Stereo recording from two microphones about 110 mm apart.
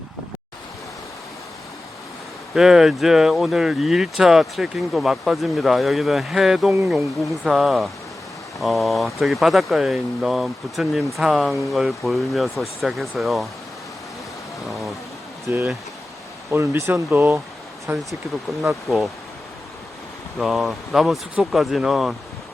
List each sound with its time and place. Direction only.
2.6 s speech: 5° right (ahead or behind)
14.7 s speech: centre (ahead or behind)
15.4 s speech: 25° right (ahead or behind)
18.6 s speech: centre (ahead or behind)
20.4 s speech: centre (ahead or behind)